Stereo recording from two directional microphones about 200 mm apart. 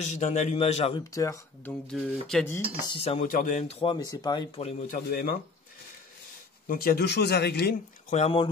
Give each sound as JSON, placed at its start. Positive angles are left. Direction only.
{"t": 0.0, "sound": "speech", "side_deg": 35}
{"t": 1.1, "sound": "speech", "side_deg": 15}
{"t": 1.9, "sound": "speech", "side_deg": 5}
{"t": 2.9, "sound": "speech", "side_deg": 30}
{"t": 4.9, "sound": "speech", "side_deg": 45}
{"t": 6.7, "sound": "speech", "side_deg": 50}
{"t": 8.1, "sound": "speech", "side_deg": 30}